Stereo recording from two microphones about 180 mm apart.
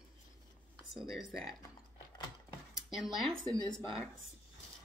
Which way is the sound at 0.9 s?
Centre (ahead or behind).